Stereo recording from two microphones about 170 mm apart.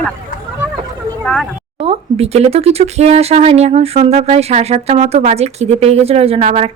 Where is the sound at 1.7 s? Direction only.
35° right (ahead or behind).